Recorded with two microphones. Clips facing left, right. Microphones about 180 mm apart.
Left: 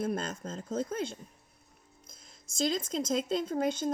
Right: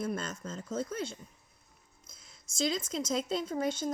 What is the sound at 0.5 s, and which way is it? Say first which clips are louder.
Speech: left 2 dB; 35° left (ahead or behind).